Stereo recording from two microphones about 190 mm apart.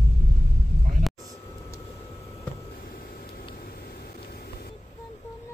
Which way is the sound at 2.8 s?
50° left (ahead or behind).